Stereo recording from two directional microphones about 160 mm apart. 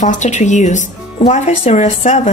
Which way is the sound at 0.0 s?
50° left (ahead or behind).